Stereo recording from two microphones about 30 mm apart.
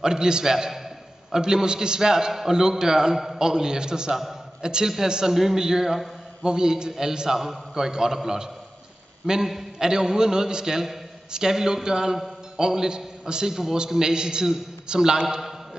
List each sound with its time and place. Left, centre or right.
0.0 s a man's voice: right
1.4 s a man's voice: right
4.1 s a man's voice: centre
4.6 s a man's voice: right
5.3 s a man's voice: centre; by 15.0 s right
15.2 s a man's voice: centre